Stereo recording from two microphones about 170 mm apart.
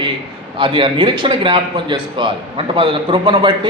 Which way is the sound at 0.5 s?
30° right (ahead or behind).